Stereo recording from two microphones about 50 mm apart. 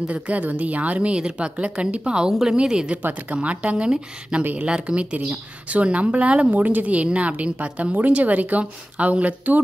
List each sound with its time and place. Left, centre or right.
0.0 s speech: right
3.0 s speech: right